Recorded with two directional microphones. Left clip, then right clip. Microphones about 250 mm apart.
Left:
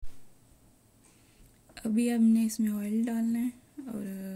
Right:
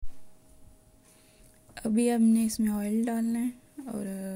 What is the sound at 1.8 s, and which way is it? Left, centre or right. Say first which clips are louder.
Speech: right 3 dB; centre.